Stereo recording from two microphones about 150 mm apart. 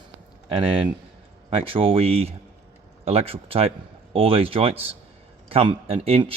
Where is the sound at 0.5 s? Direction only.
35° right (ahead or behind).